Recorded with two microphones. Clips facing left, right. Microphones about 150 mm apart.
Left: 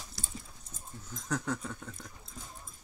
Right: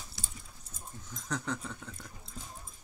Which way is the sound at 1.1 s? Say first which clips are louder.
Left 2 dB; 5° left (ahead or behind).